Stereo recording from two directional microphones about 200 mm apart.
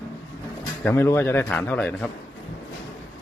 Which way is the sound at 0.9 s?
10° left (ahead or behind).